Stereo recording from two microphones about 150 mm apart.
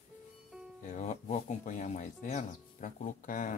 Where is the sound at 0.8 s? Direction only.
55° left (ahead or behind).